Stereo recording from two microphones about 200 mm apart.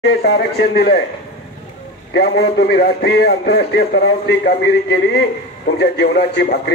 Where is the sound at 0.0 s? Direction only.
55° left (ahead or behind).